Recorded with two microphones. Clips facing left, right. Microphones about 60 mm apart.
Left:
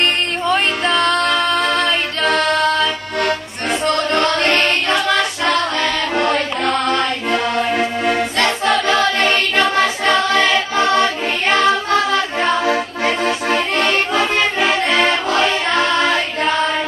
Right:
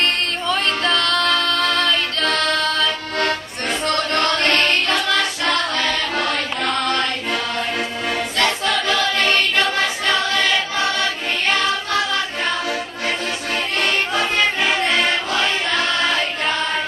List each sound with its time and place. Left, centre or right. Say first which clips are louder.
0.0 s music: left 3 dB; left
6.3 s music: left 4 dB; centre
6.9 s accordion: left 4 dB; left
8.8 s music: left 4 dB; left